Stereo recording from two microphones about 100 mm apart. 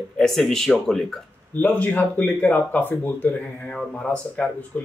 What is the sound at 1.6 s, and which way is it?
Speech, 15° left (ahead or behind).